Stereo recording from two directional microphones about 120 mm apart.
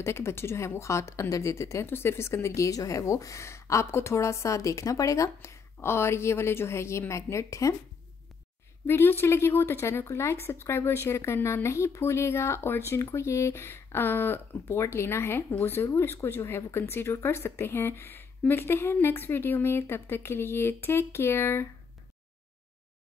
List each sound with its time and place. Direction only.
0.0 s speech: 20° left (ahead or behind)
8.8 s speech: 20° left (ahead or behind)